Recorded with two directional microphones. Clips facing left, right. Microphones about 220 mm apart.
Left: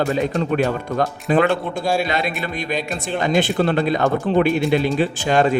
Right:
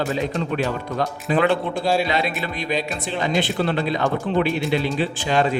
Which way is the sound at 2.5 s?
45° left (ahead or behind).